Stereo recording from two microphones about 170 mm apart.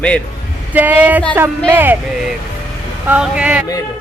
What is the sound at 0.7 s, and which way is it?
Speech, 10° right (ahead or behind).